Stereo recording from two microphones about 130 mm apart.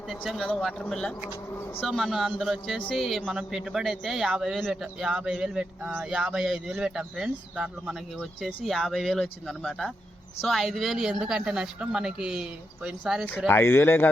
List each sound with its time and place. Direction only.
0.2 s a man's voice: 5° left (ahead or behind)
1.5 s speech: 20° left (ahead or behind)
1.8 s a man's voice: centre (ahead or behind)
13.5 s a man's voice: 15° left (ahead or behind)